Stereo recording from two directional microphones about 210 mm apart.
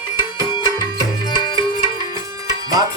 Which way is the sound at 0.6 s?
20° left (ahead or behind).